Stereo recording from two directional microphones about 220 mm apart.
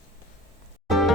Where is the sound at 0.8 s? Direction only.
Centre (ahead or behind).